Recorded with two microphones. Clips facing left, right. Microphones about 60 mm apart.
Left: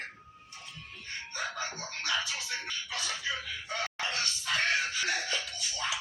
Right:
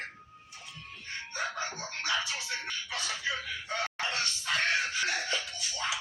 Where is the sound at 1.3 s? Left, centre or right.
Right.